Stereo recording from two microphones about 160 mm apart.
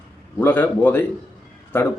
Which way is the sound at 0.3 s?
10° left (ahead or behind).